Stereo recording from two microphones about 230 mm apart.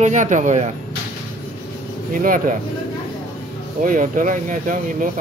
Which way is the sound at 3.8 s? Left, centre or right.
Right.